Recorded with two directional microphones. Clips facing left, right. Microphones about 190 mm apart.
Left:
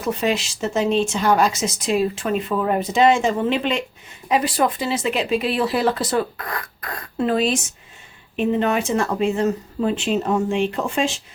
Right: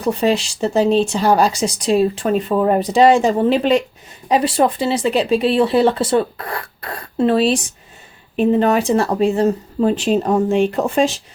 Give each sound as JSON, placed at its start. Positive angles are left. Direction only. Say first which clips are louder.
{"t": 0.0, "sound": "speech", "louder": "right 5 dB", "side_deg": -30}